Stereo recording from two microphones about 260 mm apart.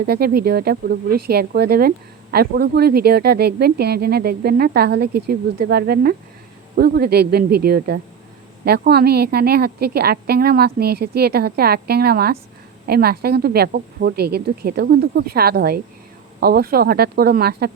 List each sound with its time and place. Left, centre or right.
0.0 s speech: right